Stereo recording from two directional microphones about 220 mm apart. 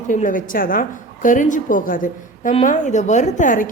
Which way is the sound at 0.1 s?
35° left (ahead or behind).